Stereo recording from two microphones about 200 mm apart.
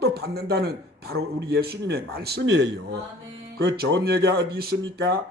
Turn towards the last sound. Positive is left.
turn(degrees=-50)  # may be behind; listen again after turning